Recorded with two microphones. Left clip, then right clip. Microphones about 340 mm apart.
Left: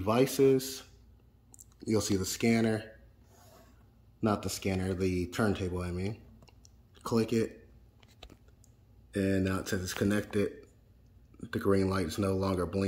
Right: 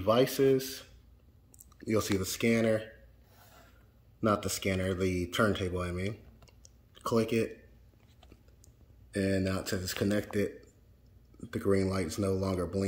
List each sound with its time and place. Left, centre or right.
0.2 s speech: centre
1.8 s speech: centre
2.5 s speech: left
4.2 s speech: centre
9.1 s speech: centre